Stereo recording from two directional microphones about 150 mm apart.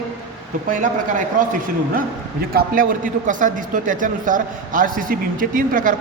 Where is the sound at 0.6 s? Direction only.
60° right (ahead or behind).